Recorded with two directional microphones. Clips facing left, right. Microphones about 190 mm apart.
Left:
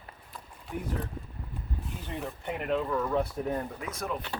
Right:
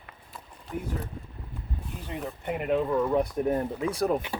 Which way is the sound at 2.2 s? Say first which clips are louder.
Right 3 dB; 10° right (ahead or behind).